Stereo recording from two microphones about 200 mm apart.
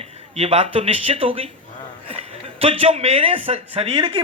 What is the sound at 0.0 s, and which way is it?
A man's voice, 30° right (ahead or behind).